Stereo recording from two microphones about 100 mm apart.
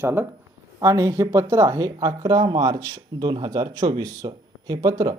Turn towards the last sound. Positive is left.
turn(degrees=-40)  # may be behind; listen again after turning